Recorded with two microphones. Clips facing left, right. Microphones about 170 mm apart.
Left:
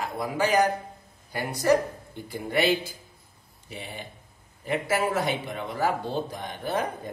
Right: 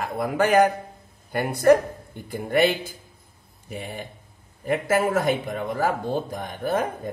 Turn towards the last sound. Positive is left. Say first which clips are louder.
# right 4 dB
turn(degrees=-50)  # may be behind; listen again after turning